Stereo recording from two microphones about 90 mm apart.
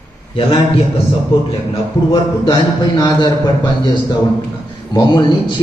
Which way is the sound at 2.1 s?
50° left (ahead or behind).